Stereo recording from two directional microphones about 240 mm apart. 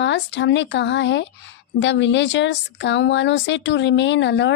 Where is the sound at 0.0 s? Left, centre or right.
Left.